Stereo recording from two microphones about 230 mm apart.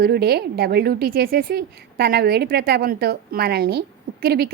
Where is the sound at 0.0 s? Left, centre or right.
Right.